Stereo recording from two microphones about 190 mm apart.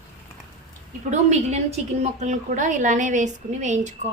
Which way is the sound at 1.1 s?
35° right (ahead or behind).